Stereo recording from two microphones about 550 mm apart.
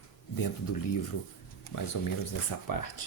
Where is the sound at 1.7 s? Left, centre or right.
Left.